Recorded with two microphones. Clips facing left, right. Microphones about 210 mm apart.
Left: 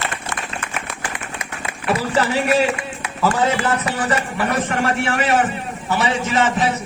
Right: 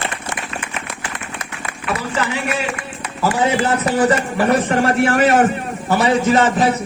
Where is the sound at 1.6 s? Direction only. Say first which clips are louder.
Left 3 dB; 30° left (ahead or behind).